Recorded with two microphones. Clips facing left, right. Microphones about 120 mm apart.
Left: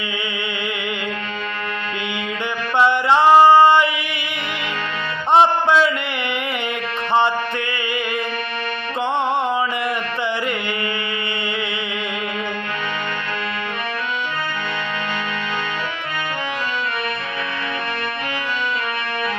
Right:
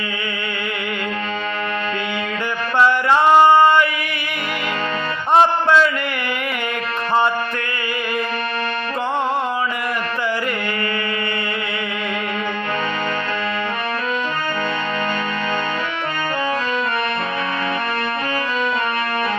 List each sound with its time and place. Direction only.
2.7 s music: 25° left (ahead or behind)
5.3 s music: 20° left (ahead or behind)